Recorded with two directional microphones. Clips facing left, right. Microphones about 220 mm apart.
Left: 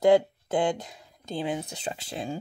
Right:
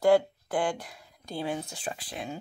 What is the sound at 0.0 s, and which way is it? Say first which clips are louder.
Speech: left 2 dB; 20° left (ahead or behind).